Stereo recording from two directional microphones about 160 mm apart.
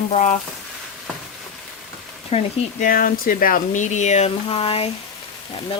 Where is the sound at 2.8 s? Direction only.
60° left (ahead or behind).